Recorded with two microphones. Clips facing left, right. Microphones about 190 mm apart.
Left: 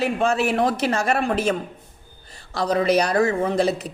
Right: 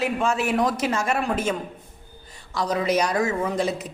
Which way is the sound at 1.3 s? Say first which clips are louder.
Left 3 dB; 70° left (ahead or behind).